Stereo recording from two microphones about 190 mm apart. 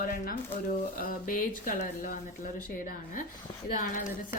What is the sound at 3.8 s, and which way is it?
Speech, 45° left (ahead or behind).